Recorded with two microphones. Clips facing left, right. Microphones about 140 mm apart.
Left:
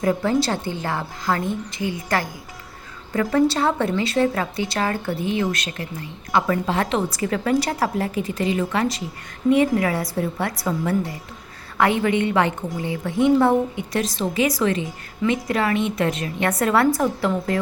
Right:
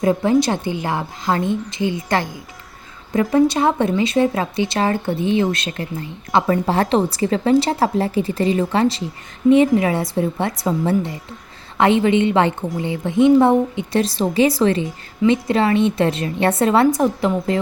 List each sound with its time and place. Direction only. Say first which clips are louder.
0.0 s a woman's voice: right 4 dB; 20° right (ahead or behind)